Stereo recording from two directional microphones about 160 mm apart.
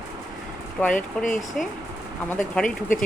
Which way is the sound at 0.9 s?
55° left (ahead or behind).